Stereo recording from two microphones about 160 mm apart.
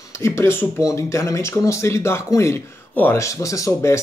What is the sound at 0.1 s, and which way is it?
Speech, 15° left (ahead or behind).